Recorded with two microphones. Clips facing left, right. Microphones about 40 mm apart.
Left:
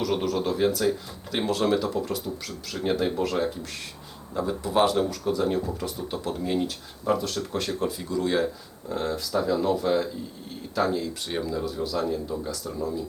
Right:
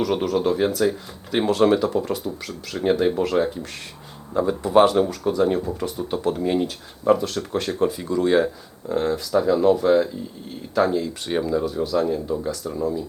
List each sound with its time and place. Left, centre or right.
0.0 s speech: centre